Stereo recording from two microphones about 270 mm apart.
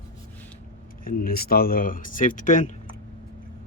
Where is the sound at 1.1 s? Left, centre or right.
Left.